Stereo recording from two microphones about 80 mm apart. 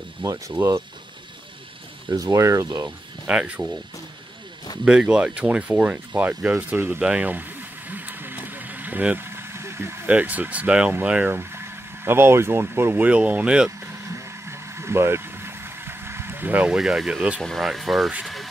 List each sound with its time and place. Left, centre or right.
0.2 s speech: right
2.0 s speech: right
2.6 s speech: right
3.3 s speech: centre
4.8 s speech: centre
6.9 s a sound: centre; by 10.0 s right
10.0 s speech: centre
11.3 s speech: right; by 13.7 s centre
13.7 s vehicle: right
16.6 s speech: centre
17.4 s speech: centre
18.2 s a sound: centre